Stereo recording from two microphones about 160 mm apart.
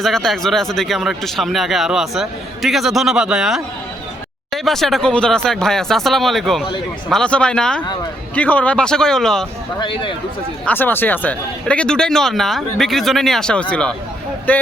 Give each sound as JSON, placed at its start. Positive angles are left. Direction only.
{"t": 0.0, "sound": "speech", "side_deg": 0}
{"t": 9.8, "sound": "speech", "side_deg": 30}
{"t": 10.7, "sound": "speech", "side_deg": 10}